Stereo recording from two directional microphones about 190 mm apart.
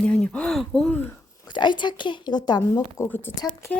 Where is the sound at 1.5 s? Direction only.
25° left (ahead or behind).